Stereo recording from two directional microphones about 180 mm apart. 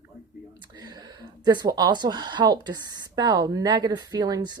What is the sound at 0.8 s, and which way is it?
Speech, 25° right (ahead or behind).